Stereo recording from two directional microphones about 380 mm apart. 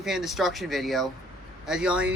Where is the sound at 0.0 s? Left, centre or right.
Centre.